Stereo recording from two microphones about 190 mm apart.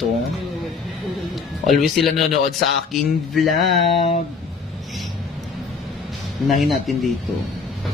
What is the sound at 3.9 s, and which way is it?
Speech, 30° left (ahead or behind).